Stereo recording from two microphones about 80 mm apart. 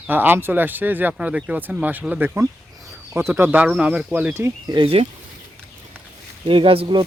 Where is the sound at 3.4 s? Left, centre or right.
Centre.